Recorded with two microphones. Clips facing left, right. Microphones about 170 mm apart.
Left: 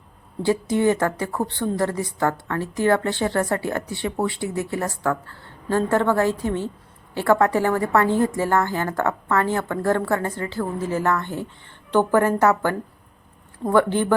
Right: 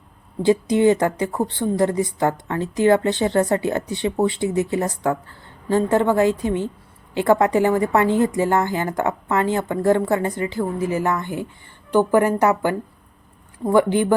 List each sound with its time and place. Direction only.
0.4 s a woman's voice: 20° right (ahead or behind)